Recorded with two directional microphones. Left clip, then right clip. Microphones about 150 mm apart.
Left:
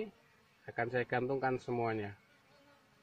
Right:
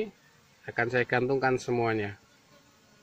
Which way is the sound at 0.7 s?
10° right (ahead or behind).